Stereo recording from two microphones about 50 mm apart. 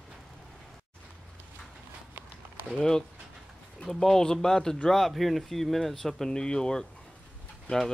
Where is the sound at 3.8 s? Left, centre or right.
Centre.